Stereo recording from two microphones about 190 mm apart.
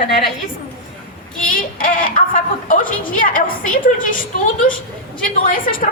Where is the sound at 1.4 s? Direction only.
45° left (ahead or behind).